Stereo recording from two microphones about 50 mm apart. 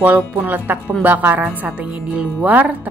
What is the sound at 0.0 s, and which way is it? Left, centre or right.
Speech, right.